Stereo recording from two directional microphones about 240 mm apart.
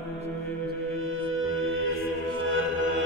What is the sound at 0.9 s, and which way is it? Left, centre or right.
Music, right.